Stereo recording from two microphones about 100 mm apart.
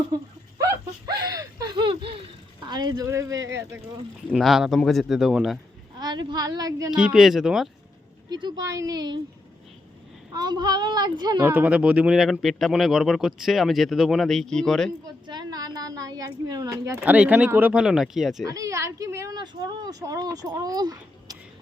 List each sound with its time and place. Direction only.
0.6 s speech: 40° right (ahead or behind)
1.7 s laughter: 55° right (ahead or behind)
2.6 s a child's voice: 45° right (ahead or behind)
4.3 s speech: centre (ahead or behind)
6.0 s speech: 50° right (ahead or behind)
6.9 s speech: 5° right (ahead or behind)
8.3 s a child's voice: 50° right (ahead or behind)
8.7 s speech: 35° right (ahead or behind)
10.3 s a child's voice: 45° right (ahead or behind)
11.4 s speech: 20° right (ahead or behind); by 14.9 s 5° left (ahead or behind)
15.3 s speech: 45° right (ahead or behind)
17.0 s speech: 15° right (ahead or behind)
18.4 s speech: 35° right (ahead or behind)
19.3 s speech: 40° right (ahead or behind)